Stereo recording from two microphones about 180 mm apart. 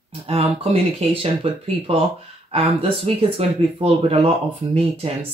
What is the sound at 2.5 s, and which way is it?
Speech, 35° right (ahead or behind).